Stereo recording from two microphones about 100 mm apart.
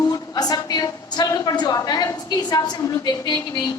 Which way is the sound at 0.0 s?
40° left (ahead or behind).